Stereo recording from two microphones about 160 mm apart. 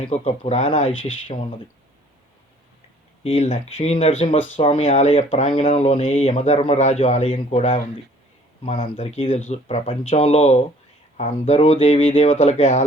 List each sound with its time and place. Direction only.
0.1 s speech: 40° left (ahead or behind)
3.2 s speech: 40° left (ahead or behind)